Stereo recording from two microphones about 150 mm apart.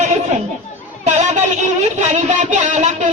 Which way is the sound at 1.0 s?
50° right (ahead or behind).